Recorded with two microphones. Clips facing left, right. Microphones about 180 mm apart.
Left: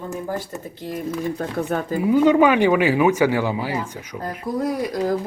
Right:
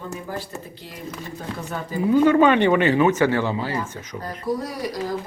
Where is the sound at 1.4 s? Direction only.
55° left (ahead or behind).